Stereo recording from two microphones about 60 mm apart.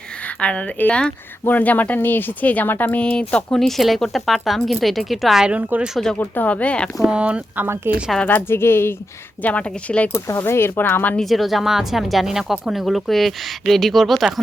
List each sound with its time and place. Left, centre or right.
0.3 s speech: centre
3.0 s speech: centre
5.4 s a woman's voice: right
6.1 s speech: left
7.0 s a woman's voice: centre
7.5 s speech: right
8.1 s speech: centre
8.4 s speech: left
9.4 s speech: left
10.4 s speech: left
11.2 s speech: centre